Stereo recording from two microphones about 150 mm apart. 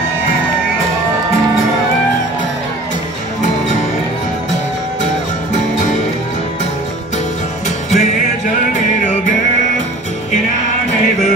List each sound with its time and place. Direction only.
5.5 s music: 50° left (ahead or behind)
7.6 s music: 50° left (ahead or behind)